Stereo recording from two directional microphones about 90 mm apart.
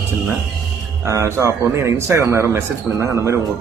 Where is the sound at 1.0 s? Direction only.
35° right (ahead or behind).